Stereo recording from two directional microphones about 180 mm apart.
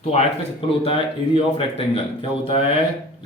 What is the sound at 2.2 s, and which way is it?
Speech, 30° left (ahead or behind).